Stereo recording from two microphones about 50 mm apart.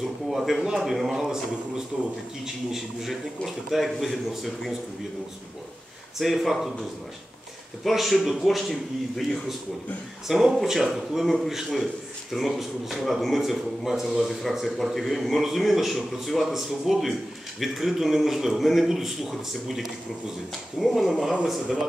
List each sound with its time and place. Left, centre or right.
0.0 s a man's voice: centre
6.1 s a man's voice: centre
7.8 s a man's voice: centre
10.2 s a man's voice: centre
21.2 s speech: centre